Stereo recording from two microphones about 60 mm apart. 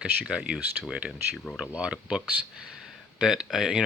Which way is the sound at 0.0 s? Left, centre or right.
Centre.